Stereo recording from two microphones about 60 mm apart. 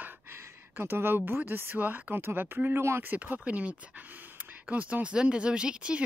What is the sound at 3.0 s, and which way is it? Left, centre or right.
Speech, right.